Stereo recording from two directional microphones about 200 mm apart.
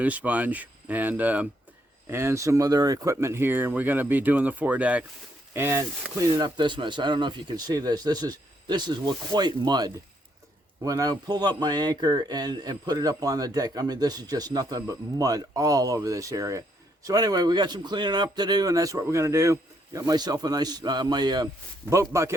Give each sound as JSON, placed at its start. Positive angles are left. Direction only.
{"t": 0.0, "sound": "speech", "side_deg": -5}